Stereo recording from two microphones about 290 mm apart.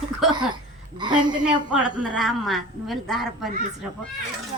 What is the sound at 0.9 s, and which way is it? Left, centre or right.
Speech, centre.